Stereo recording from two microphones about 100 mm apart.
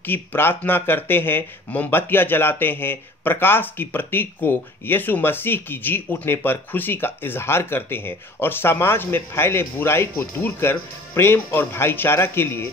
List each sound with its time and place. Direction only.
0.0 s speech: 20° left (ahead or behind)